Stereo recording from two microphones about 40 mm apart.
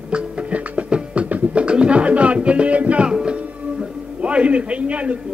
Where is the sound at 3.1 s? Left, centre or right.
Right.